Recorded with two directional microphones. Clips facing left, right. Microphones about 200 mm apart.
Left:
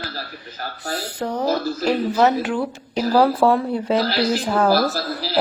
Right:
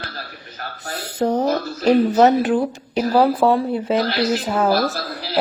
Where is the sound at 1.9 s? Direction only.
40° right (ahead or behind).